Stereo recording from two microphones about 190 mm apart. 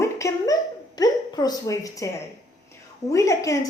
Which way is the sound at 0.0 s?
15° left (ahead or behind).